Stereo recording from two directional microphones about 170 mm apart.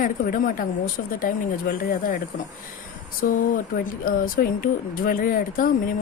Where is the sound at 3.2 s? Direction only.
55° left (ahead or behind).